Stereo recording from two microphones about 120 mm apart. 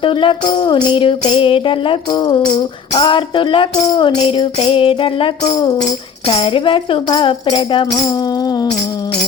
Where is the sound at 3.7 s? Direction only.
35° left (ahead or behind).